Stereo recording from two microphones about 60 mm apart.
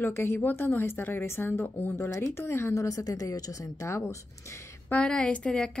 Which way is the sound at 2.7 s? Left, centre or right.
Left.